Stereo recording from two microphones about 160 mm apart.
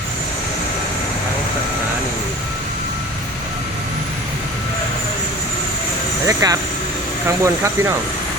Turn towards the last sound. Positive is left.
turn(degrees=-20)  # may be behind; listen again after turning